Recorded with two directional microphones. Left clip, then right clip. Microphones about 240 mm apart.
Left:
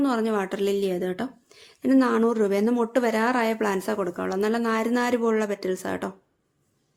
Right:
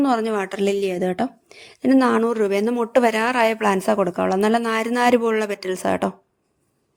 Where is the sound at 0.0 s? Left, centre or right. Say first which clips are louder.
Right 4 dB; right.